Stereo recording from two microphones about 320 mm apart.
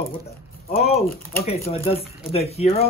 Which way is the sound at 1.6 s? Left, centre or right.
Centre.